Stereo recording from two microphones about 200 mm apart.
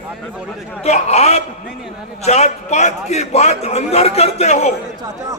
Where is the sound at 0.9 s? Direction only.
30° left (ahead or behind).